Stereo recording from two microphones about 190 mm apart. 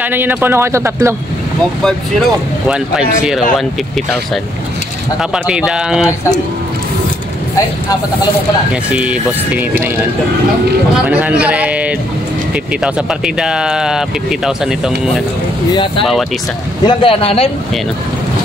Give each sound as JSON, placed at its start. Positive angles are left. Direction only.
{"t": 0.0, "sound": "speech", "side_deg": -10}
{"t": 1.8, "sound": "speech", "side_deg": 5}
{"t": 5.3, "sound": "speech", "side_deg": -5}
{"t": 8.9, "sound": "speech", "side_deg": -5}
{"t": 11.1, "sound": "speech", "side_deg": -5}
{"t": 15.7, "sound": "speech", "side_deg": 25}